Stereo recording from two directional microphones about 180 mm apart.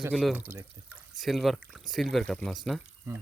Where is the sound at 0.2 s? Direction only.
5° right (ahead or behind).